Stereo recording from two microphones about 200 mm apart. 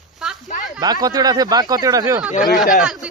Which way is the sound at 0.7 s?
20° right (ahead or behind).